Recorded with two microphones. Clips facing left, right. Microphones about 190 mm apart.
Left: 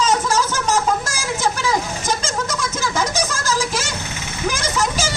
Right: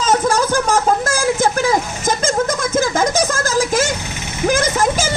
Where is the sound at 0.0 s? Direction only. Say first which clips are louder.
Right 3 dB; 55° right (ahead or behind).